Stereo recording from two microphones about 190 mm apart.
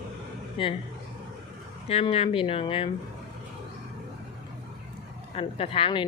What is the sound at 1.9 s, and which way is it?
Speech, 30° left (ahead or behind).